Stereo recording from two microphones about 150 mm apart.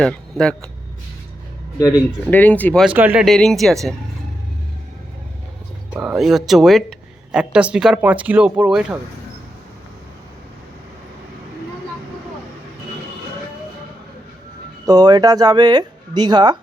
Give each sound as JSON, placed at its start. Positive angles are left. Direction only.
{"t": 0.0, "sound": "speech", "side_deg": 5}
{"t": 2.2, "sound": "speech", "side_deg": 10}
{"t": 2.8, "sound": "speech", "side_deg": -10}
{"t": 3.2, "sound": "speech", "side_deg": 0}
{"t": 5.9, "sound": "speech", "side_deg": -5}
{"t": 14.8, "sound": "speech", "side_deg": -25}